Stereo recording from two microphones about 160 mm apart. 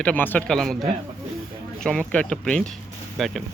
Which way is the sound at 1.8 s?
5° left (ahead or behind).